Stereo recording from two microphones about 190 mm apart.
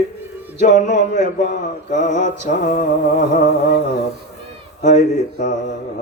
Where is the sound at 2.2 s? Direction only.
50° left (ahead or behind).